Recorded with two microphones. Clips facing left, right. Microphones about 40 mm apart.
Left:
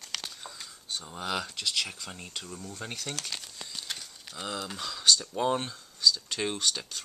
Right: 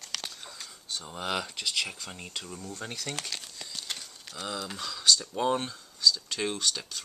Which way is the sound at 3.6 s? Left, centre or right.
Centre.